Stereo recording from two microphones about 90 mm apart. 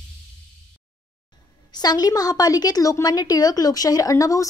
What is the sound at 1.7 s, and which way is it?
A woman's voice, 50° left (ahead or behind).